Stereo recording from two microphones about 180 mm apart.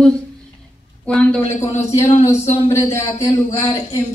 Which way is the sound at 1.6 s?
15° left (ahead or behind).